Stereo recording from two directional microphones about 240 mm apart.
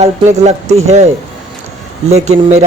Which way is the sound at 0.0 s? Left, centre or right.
Right.